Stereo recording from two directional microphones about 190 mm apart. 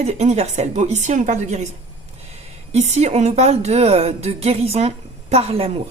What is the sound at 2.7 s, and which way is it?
A woman's voice, 35° right (ahead or behind).